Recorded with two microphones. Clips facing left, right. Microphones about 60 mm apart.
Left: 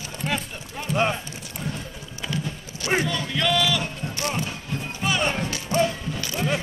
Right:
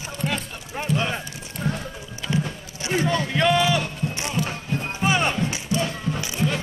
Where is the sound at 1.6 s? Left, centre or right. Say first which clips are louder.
Right 5 dB; right.